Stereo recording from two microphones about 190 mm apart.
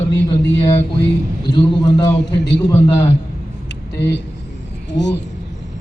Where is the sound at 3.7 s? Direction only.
65° left (ahead or behind).